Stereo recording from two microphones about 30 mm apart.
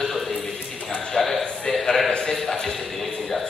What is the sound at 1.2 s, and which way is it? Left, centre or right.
Speech, centre.